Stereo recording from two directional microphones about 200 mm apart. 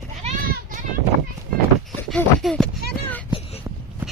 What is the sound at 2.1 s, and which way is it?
Speech, centre (ahead or behind).